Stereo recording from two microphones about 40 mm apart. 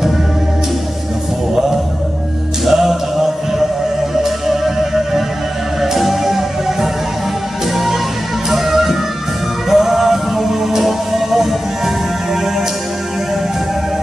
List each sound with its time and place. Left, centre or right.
2.6 s male singing: centre
4.1 s music: centre
8.5 s music: centre